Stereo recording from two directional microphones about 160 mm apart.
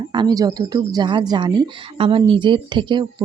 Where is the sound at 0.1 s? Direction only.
25° right (ahead or behind).